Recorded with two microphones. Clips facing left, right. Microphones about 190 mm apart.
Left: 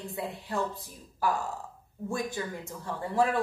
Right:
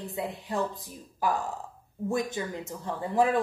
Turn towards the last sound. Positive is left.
turn(degrees=-15)  # may be behind; listen again after turning